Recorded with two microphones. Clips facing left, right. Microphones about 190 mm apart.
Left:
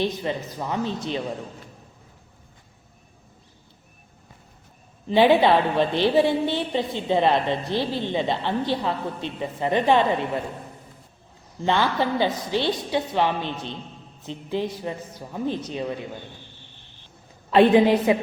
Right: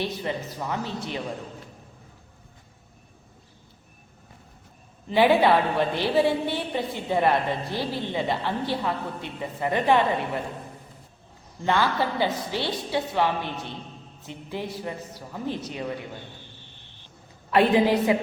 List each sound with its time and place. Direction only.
0.0 s a woman's voice: 20° left (ahead or behind)
5.0 s a woman's voice: 20° left (ahead or behind)
11.6 s a woman's voice: 20° left (ahead or behind)
17.5 s a woman's voice: 20° left (ahead or behind)